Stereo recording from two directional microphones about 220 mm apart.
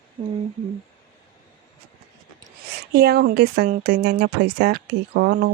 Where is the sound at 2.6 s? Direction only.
45° right (ahead or behind).